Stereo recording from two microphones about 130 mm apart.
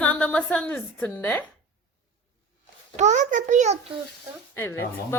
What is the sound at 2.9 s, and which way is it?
Speech, 65° right (ahead or behind).